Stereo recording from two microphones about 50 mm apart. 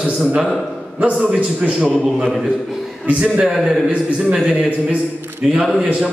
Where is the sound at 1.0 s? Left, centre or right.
Right.